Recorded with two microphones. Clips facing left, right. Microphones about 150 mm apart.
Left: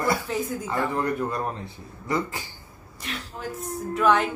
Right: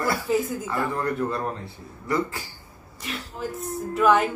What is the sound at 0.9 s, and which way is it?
Speech, 20° left (ahead or behind).